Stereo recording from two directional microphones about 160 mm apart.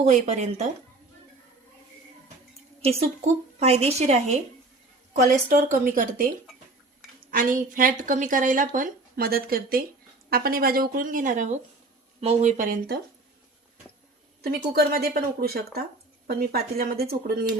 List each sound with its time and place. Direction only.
0.0 s speech: 45° right (ahead or behind)
2.8 s a woman's voice: 40° right (ahead or behind)
5.3 s a woman's voice: 55° right (ahead or behind)
7.3 s a woman's voice: 60° right (ahead or behind)
14.4 s a woman's voice: 70° right (ahead or behind)